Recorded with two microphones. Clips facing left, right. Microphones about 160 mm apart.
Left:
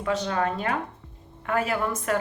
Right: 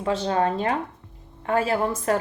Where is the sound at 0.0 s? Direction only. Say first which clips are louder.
Right 3 dB; 30° right (ahead or behind).